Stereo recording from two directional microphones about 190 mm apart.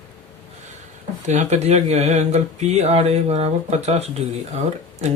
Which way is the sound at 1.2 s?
35° right (ahead or behind).